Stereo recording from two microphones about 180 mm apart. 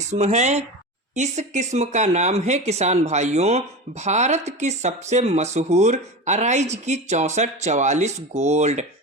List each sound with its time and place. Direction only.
0.1 s speech: 40° right (ahead or behind)